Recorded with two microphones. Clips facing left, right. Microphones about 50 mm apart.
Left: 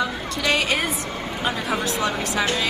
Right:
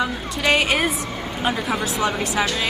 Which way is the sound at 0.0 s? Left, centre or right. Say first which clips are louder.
Right 2 dB; right.